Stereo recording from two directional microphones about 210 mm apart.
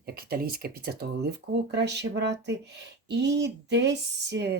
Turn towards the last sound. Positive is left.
turn(degrees=-50)  # may be behind; listen again after turning